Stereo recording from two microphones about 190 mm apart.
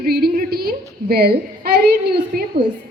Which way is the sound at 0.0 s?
55° right (ahead or behind).